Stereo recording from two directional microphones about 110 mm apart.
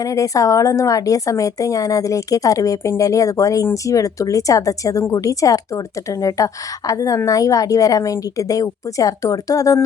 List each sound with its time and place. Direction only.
0.0 s a woman's voice: 30° left (ahead or behind)